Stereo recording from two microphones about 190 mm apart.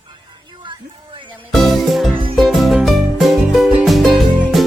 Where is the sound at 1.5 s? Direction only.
Centre (ahead or behind).